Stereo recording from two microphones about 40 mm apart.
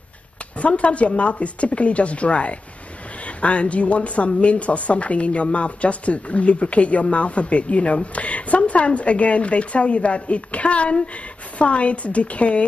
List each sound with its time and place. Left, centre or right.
0.6 s speech: left